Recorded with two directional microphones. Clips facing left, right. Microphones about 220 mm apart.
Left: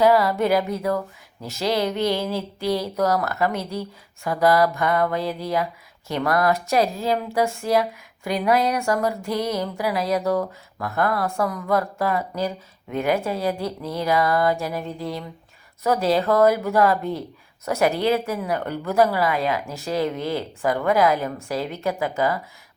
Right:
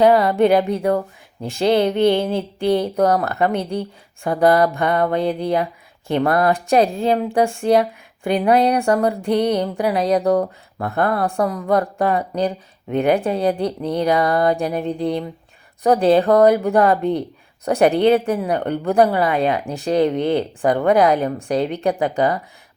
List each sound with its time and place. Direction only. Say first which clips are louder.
0.0 s speech: right 4 dB; 30° right (ahead or behind)
14.8 s speech: right 8 dB; 20° right (ahead or behind)
16.0 s speech: right 5 dB; 35° right (ahead or behind)